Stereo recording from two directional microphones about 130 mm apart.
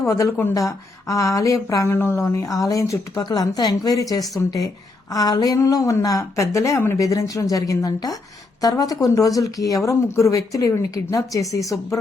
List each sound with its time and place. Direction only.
0.0 s a woman's voice: 25° left (ahead or behind)